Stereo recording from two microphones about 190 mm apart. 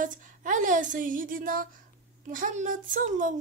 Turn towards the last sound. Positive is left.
turn(degrees=-40)  # may be behind; listen again after turning